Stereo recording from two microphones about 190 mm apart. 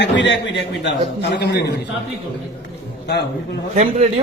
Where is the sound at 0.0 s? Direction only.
70° left (ahead or behind).